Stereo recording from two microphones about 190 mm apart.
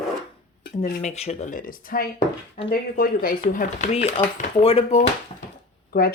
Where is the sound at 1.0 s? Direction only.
35° left (ahead or behind).